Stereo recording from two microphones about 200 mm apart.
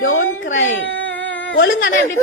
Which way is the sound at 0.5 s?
70° left (ahead or behind).